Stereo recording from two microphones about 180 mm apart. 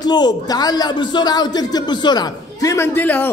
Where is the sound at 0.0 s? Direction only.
25° left (ahead or behind).